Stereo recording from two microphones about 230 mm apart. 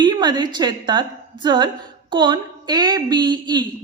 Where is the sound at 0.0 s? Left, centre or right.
Centre.